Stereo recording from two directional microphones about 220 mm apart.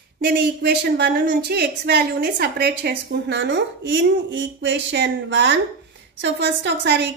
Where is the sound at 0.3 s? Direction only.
45° right (ahead or behind).